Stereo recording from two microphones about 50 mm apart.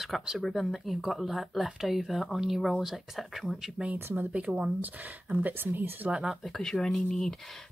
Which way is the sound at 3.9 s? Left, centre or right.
Right.